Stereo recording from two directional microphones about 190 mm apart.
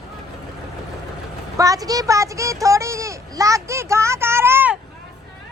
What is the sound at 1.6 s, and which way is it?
A woman's voice, 20° right (ahead or behind).